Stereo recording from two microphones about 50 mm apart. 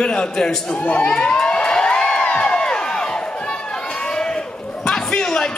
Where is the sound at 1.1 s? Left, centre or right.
Centre.